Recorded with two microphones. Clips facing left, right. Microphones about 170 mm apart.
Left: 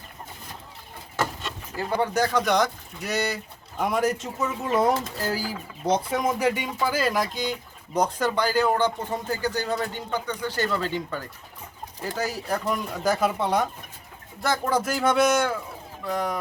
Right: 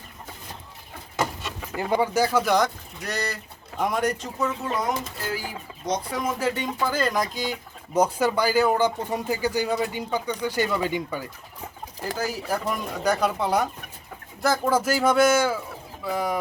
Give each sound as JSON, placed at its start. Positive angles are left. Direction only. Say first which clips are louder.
{"t": 1.1, "sound": "a sound", "louder": "right 1 dB", "side_deg": -15}
{"t": 2.0, "sound": "speech", "louder": "right 1 dB", "side_deg": -5}
{"t": 4.8, "sound": "speech", "louder": "left 5 dB", "side_deg": 35}
{"t": 6.2, "sound": "speech", "louder": "left 2 dB", "side_deg": 15}
{"t": 12.1, "sound": "speech", "louder": "even", "side_deg": 0}